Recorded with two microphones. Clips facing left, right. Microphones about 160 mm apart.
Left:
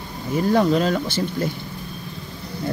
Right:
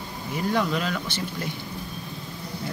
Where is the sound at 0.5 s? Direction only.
35° left (ahead or behind).